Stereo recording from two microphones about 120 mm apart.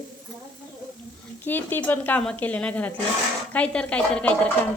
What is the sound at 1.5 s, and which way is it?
A woman's voice, 15° left (ahead or behind).